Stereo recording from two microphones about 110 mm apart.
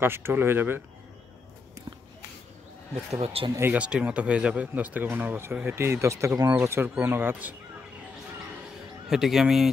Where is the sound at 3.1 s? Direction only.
70° right (ahead or behind).